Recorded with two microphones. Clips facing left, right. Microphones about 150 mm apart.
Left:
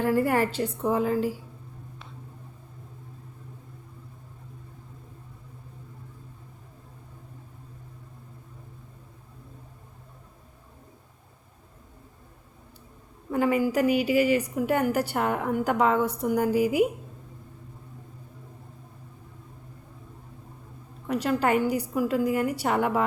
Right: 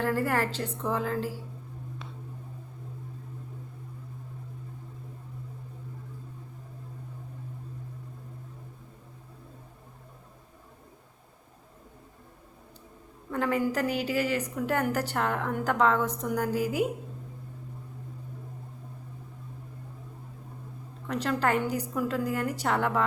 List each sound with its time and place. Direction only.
0.0 s a woman's voice: 15° left (ahead or behind)
13.3 s a woman's voice: 10° left (ahead or behind)
21.1 s a woman's voice: 10° left (ahead or behind)